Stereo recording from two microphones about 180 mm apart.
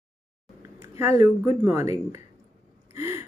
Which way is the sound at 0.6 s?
15° right (ahead or behind).